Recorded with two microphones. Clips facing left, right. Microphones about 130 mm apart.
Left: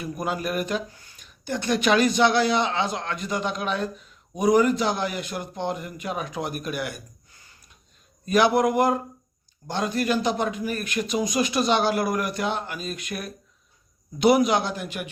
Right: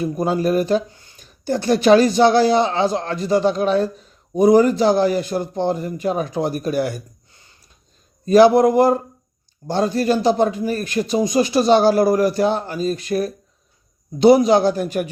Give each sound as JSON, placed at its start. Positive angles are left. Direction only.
{"t": 0.0, "sound": "speech", "side_deg": -30}